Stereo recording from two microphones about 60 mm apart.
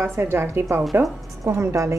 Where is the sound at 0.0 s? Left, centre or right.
Right.